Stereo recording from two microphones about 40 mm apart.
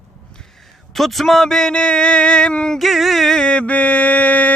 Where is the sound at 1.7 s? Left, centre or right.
Left.